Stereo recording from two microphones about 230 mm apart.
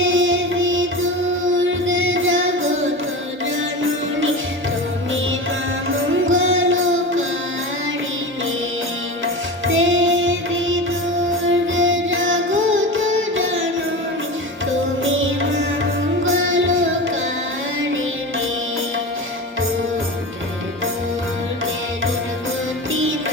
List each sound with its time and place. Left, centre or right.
0.0 s music: right
6.2 s music: right
9.2 s music: right
15.0 s music: right
22.9 s music: right